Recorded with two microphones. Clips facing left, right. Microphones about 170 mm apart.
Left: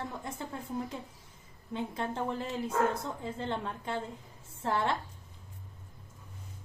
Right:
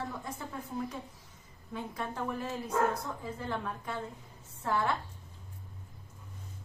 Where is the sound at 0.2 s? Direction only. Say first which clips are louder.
Left 1 dB; 25° left (ahead or behind).